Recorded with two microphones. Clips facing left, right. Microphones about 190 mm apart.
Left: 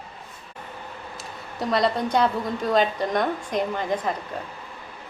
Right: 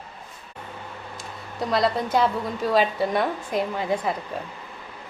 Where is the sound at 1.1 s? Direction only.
Centre (ahead or behind).